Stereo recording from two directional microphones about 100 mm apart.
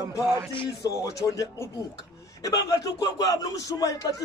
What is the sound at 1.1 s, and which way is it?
A man's voice, 35° left (ahead or behind).